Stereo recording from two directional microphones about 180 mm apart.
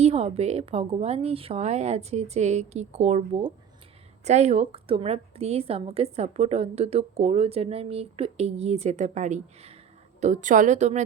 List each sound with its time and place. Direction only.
0.0 s a woman's voice: 35° right (ahead or behind)